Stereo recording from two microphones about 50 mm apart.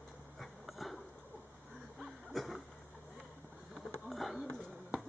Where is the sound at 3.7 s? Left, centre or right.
Centre.